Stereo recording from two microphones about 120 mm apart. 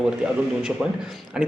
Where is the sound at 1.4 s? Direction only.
5° right (ahead or behind).